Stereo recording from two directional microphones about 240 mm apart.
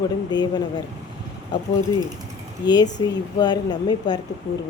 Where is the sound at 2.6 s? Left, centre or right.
Centre.